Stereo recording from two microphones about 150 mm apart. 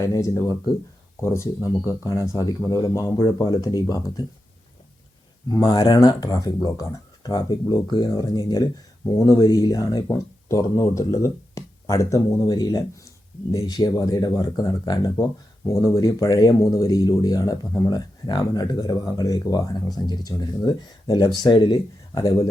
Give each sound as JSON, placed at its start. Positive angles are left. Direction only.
{"t": 0.0, "sound": "speech", "side_deg": 20}
{"t": 5.5, "sound": "speech", "side_deg": 25}